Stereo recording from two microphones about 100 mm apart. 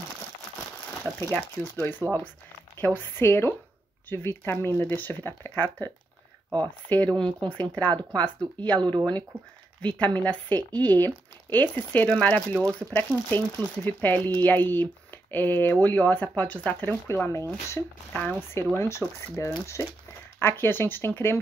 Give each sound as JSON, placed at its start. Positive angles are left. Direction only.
{"t": 1.3, "sound": "speech", "side_deg": 20}
{"t": 6.9, "sound": "speech", "side_deg": 15}
{"t": 8.7, "sound": "speech", "side_deg": -50}
{"t": 9.8, "sound": "speech", "side_deg": 15}
{"t": 13.3, "sound": "speech", "side_deg": 20}
{"t": 17.1, "sound": "speech", "side_deg": 30}
{"t": 18.1, "sound": "speech", "side_deg": 10}
{"t": 18.5, "sound": "speech", "side_deg": 25}